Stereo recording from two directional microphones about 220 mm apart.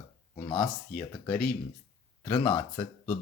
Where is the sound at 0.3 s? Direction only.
20° left (ahead or behind).